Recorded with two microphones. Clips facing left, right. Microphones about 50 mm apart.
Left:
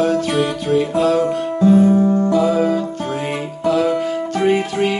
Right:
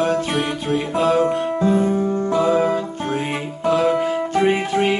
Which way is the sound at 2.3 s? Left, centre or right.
Right.